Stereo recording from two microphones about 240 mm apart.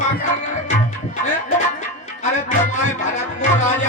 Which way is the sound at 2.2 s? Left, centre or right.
Left.